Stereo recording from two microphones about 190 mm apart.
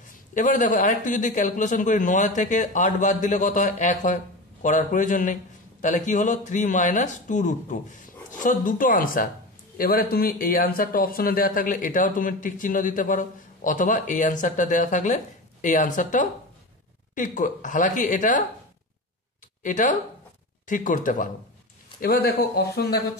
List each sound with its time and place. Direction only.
0.3 s a man's voice: 45° left (ahead or behind)
19.6 s a man's voice: 40° left (ahead or behind); by 23.0 s 55° left (ahead or behind)